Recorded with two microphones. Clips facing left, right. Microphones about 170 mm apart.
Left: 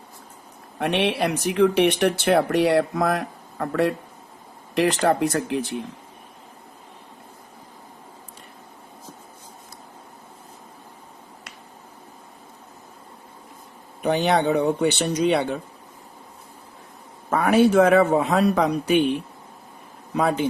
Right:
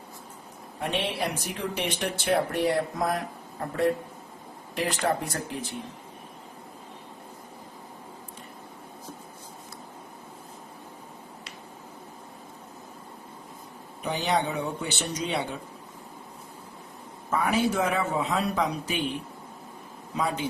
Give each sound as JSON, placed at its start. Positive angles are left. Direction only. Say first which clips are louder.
{"t": 0.8, "sound": "speech", "louder": "left 7 dB", "side_deg": 70}
{"t": 14.0, "sound": "speech", "louder": "left 7 dB", "side_deg": 65}
{"t": 17.2, "sound": "speech", "louder": "left 8 dB", "side_deg": 65}
{"t": 20.1, "sound": "speech", "louder": "left 7 dB", "side_deg": 65}